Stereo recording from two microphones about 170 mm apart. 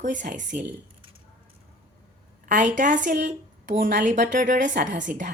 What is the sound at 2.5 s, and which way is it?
Speech, 50° right (ahead or behind).